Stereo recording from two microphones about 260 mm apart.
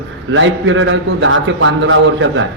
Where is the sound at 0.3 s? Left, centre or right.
Right.